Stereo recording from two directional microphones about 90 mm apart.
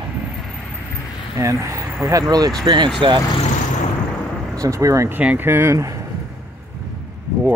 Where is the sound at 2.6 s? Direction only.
60° right (ahead or behind).